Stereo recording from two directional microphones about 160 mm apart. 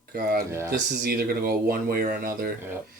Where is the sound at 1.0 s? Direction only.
70° right (ahead or behind).